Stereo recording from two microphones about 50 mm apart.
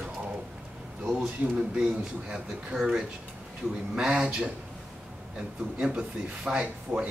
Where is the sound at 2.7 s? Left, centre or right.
Centre.